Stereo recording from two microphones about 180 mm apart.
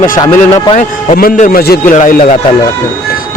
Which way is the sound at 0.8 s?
50° left (ahead or behind).